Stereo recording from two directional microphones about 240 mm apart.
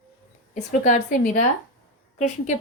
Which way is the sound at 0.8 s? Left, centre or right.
Left.